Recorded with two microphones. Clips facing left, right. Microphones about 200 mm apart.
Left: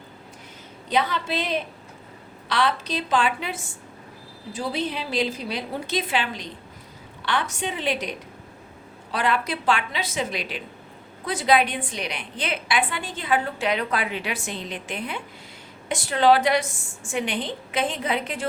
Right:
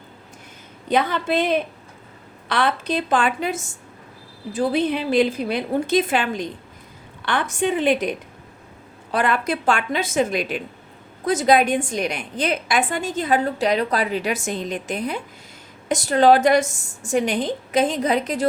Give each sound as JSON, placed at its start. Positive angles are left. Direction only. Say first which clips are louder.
{"t": 0.9, "sound": "a woman's voice", "louder": "right 4 dB", "side_deg": -50}
{"t": 9.1, "sound": "a woman's voice", "louder": "right 4 dB", "side_deg": -50}